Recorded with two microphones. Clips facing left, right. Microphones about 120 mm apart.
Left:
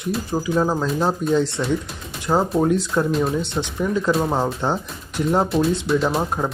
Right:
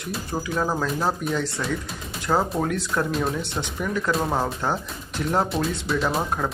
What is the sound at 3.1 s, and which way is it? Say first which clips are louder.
Speech: left 4 dB; centre (ahead or behind).